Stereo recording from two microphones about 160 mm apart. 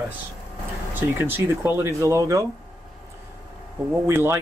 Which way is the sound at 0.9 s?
15° right (ahead or behind).